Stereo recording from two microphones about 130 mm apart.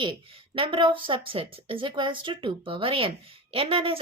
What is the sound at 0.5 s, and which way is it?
Speech, 40° right (ahead or behind).